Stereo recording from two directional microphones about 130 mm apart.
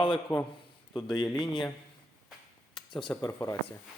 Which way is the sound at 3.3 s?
20° left (ahead or behind).